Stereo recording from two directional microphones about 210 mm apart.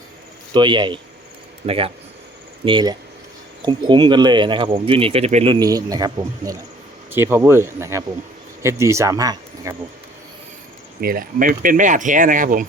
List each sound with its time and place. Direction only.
0.5 s speech: 20° right (ahead or behind)
5.5 s speech: 15° right (ahead or behind)
11.0 s speech: 45° right (ahead or behind)